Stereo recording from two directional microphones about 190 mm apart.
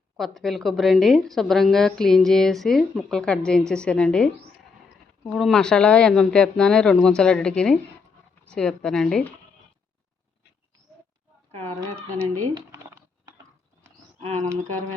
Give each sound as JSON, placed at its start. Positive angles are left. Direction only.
{"t": 0.2, "sound": "a woman's voice", "side_deg": 0}
{"t": 5.3, "sound": "a woman's voice", "side_deg": 0}
{"t": 12.5, "sound": "a sound", "side_deg": -15}
{"t": 14.2, "sound": "speech", "side_deg": -35}